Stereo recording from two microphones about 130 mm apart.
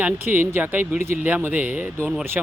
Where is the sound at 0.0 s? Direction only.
15° right (ahead or behind).